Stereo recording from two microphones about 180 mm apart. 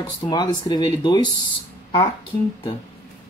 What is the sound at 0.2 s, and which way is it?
Speech, 20° left (ahead or behind).